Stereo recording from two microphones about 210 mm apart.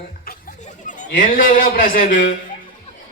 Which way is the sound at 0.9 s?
40° left (ahead or behind).